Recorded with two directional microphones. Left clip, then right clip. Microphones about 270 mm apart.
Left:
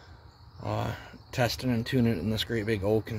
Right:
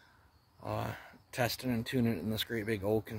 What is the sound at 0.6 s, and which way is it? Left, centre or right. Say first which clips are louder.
Speech: left 5 dB; right.